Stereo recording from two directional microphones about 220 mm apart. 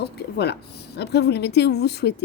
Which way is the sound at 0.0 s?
50° left (ahead or behind).